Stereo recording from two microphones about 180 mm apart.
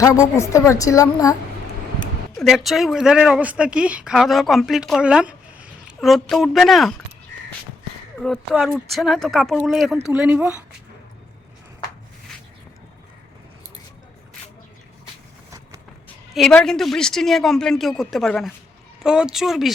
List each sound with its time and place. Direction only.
0.0 s a woman's voice: 15° left (ahead or behind)
2.0 s speech: centre (ahead or behind)
8.2 s a woman's voice: 5° left (ahead or behind)
16.3 s speech: centre (ahead or behind)